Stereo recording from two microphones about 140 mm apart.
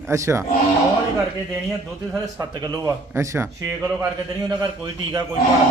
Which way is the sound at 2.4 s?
30° right (ahead or behind).